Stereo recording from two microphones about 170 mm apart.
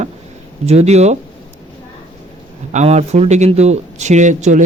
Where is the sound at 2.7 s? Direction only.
40° right (ahead or behind).